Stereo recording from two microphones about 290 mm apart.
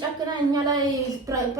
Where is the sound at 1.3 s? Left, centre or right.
Centre.